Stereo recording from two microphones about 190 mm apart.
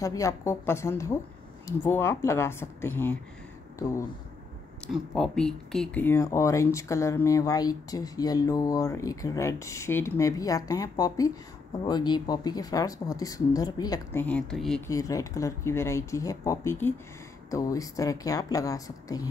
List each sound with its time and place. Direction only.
0.0 s speech: 15° left (ahead or behind)
4.8 s speech: centre (ahead or behind); by 14.2 s 20° left (ahead or behind)
14.2 s speech: 5° left (ahead or behind)
14.9 s speech: 20° left (ahead or behind)